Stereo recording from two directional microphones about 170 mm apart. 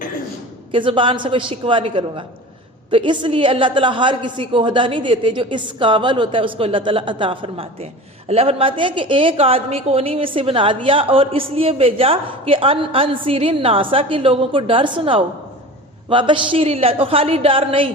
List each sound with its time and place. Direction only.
0.7 s a woman's voice: 30° right (ahead or behind)